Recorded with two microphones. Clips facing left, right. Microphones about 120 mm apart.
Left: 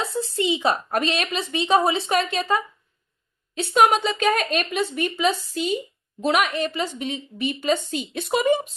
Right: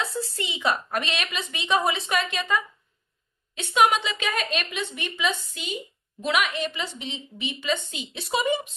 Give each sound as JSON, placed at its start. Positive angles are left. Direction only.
{"t": 0.0, "sound": "a woman's voice", "side_deg": 25}